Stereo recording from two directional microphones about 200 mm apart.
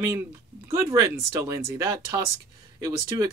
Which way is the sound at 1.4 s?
15° right (ahead or behind).